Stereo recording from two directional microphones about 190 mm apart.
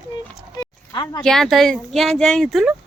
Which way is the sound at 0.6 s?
20° left (ahead or behind).